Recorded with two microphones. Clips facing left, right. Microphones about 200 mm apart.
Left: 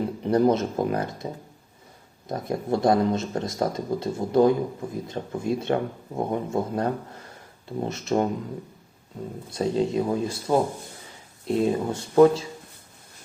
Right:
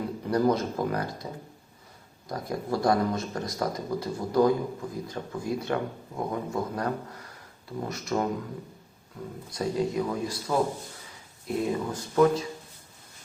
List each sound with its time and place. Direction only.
0.2 s speech: 25° left (ahead or behind)
9.5 s speech: 25° left (ahead or behind)